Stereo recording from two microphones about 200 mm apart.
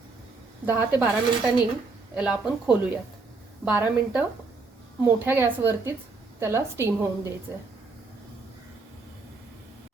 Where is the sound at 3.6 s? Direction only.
10° right (ahead or behind).